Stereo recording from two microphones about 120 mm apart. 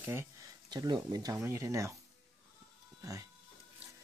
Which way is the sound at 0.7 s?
35° right (ahead or behind).